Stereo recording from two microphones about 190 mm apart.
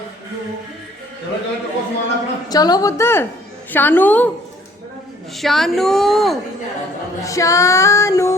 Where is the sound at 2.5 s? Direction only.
20° left (ahead or behind).